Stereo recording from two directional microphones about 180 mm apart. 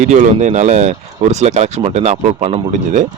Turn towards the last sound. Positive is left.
turn(degrees=-45)  # may be behind; listen again after turning